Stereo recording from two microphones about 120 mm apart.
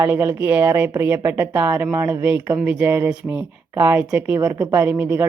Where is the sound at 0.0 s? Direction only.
20° right (ahead or behind).